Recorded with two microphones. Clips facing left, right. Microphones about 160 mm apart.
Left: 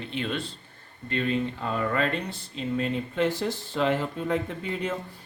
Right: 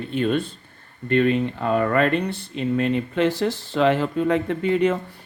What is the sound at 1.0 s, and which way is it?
Speech, 60° right (ahead or behind).